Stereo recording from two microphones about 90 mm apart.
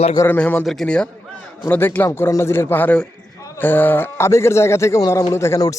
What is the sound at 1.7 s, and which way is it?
Speech, 20° left (ahead or behind).